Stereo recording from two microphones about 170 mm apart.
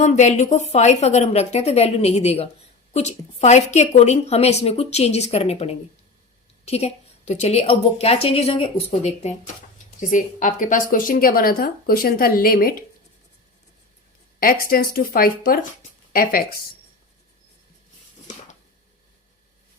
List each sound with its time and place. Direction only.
0.0 s a woman's voice: 45° left (ahead or behind); by 12.7 s 60° left (ahead or behind)
14.3 s speech: 55° left (ahead or behind)